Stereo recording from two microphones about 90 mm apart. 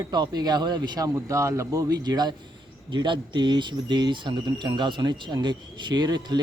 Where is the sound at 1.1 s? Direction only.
35° right (ahead or behind); by 2.3 s 50° right (ahead or behind).